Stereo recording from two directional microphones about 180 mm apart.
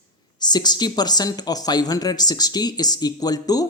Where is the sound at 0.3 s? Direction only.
25° left (ahead or behind).